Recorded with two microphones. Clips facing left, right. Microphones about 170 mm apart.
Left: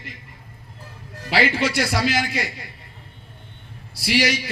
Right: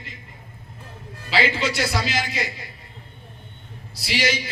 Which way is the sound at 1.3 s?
60° left (ahead or behind).